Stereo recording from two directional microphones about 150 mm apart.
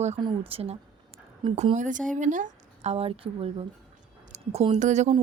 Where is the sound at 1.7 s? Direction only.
60° right (ahead or behind).